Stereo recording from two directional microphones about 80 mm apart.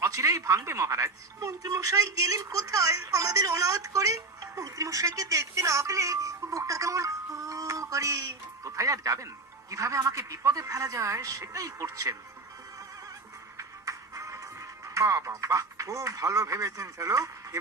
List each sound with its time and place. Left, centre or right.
0.0 s speech: right
13.6 s music: right